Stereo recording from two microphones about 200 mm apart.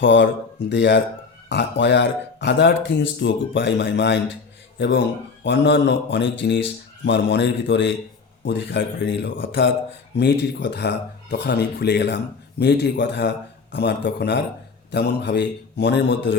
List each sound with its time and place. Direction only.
0.0 s a man's voice: 65° left (ahead or behind)